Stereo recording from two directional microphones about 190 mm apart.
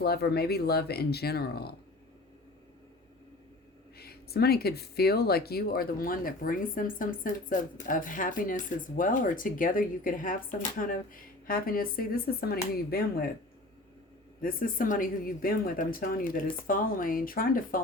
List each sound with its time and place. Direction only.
0.0 s speech: 55° left (ahead or behind)
3.9 s speech: 55° left (ahead or behind)
14.4 s speech: 45° left (ahead or behind)